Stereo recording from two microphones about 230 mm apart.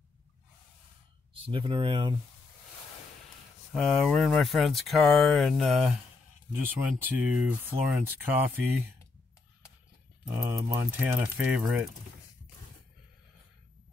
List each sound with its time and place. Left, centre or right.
1.3 s speech: right
3.7 s speech: centre
10.3 s speech: centre